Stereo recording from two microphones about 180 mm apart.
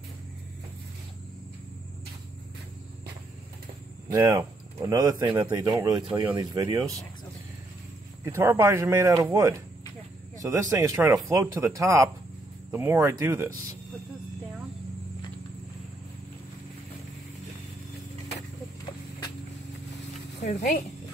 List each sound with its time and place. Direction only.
4.1 s speech: 20° right (ahead or behind)
8.3 s speech: 15° right (ahead or behind)
20.4 s speech: 40° left (ahead or behind)